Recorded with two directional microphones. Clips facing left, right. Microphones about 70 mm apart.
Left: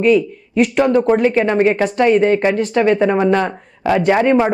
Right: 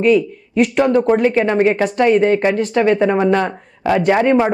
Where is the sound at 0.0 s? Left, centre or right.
Centre.